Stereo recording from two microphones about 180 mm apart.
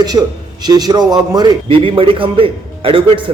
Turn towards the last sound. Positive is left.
turn(degrees=-30)  # may be behind; listen again after turning